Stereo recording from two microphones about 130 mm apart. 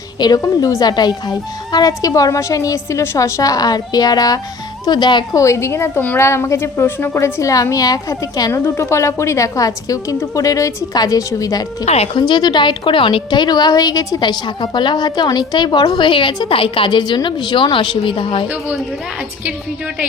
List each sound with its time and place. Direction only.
0.2 s a woman's voice: 30° left (ahead or behind)
5.4 s a woman's voice: 20° left (ahead or behind)
11.9 s speech: 55° left (ahead or behind)
12.3 s a woman's voice: 35° left (ahead or behind)